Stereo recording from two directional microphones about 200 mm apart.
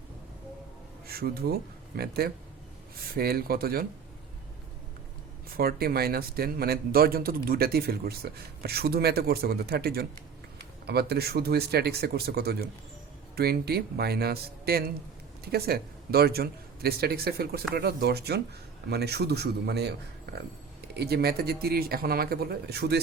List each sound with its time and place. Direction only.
1.0 s a man's voice: 50° right (ahead or behind)
5.5 s a man's voice: 50° right (ahead or behind)